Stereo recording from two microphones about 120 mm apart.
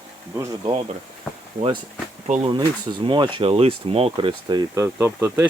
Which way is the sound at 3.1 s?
40° right (ahead or behind).